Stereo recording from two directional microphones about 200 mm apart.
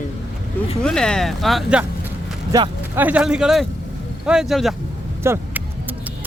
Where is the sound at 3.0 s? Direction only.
5° right (ahead or behind).